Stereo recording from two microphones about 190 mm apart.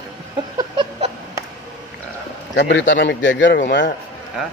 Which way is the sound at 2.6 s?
65° left (ahead or behind).